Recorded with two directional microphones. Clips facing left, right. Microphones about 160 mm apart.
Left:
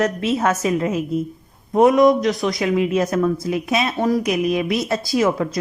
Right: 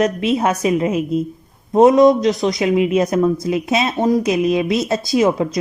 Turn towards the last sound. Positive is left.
turn(degrees=-20)  # may be behind; listen again after turning